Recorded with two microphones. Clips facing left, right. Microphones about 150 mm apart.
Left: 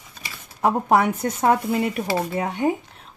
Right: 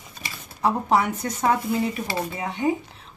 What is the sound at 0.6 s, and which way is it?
Speech, 55° left (ahead or behind).